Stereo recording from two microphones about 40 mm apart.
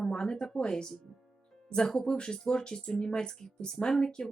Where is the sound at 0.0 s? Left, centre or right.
Centre.